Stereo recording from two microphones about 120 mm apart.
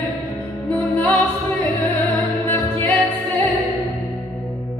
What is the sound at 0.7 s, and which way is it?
Music, 15° left (ahead or behind).